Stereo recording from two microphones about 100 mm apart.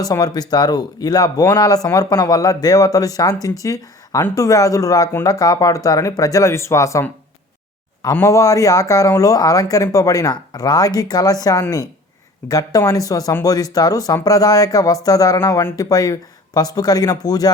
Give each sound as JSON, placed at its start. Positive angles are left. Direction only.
{"t": 0.0, "sound": "speech", "side_deg": 40}
{"t": 8.2, "sound": "speech", "side_deg": 35}
{"t": 12.5, "sound": "speech", "side_deg": 40}